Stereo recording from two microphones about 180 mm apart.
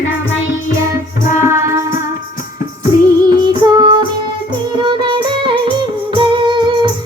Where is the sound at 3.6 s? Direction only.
25° right (ahead or behind).